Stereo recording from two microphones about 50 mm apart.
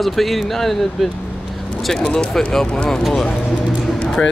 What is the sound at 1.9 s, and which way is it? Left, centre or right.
Speech, centre.